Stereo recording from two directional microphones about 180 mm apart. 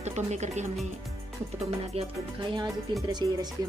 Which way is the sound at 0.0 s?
40° right (ahead or behind).